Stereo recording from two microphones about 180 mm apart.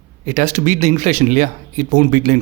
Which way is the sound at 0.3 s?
45° right (ahead or behind).